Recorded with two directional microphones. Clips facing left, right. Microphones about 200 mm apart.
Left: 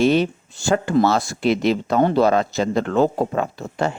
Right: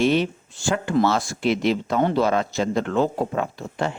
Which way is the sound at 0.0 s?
40° left (ahead or behind).